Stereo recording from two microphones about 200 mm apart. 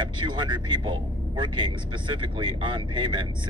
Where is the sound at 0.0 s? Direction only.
25° right (ahead or behind).